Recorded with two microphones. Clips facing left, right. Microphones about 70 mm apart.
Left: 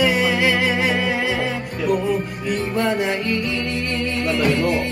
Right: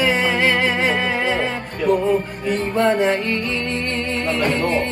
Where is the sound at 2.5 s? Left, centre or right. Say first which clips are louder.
Right 3 dB; right.